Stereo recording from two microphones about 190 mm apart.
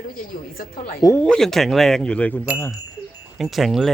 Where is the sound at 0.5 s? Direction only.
50° left (ahead or behind).